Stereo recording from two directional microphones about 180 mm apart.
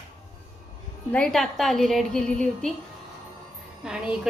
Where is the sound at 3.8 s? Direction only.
5° right (ahead or behind).